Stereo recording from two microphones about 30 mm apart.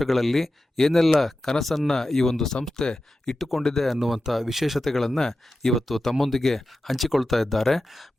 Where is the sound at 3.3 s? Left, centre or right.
Centre.